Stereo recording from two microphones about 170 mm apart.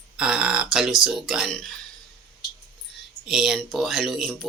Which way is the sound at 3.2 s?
Centre (ahead or behind).